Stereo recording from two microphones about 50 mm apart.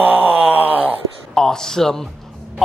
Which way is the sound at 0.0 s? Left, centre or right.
Right.